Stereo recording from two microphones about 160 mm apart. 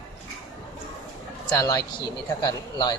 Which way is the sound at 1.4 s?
20° left (ahead or behind).